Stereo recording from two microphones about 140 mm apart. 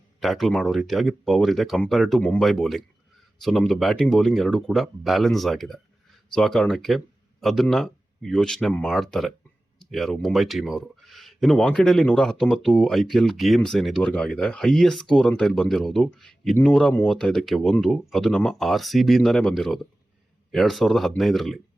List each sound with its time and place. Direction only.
0.2 s speech: centre (ahead or behind)